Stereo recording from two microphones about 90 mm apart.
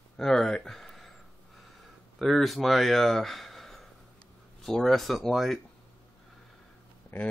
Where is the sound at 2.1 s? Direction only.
Centre (ahead or behind).